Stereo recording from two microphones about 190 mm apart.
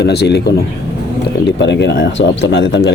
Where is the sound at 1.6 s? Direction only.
65° left (ahead or behind).